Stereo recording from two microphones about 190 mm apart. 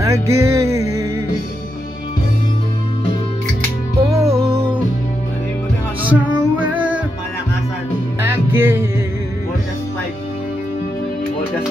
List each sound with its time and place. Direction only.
0.0 s music: 15° right (ahead or behind)
4.1 s music: 15° right (ahead or behind)
6.0 s music: 10° right (ahead or behind)
8.5 s music: 10° right (ahead or behind)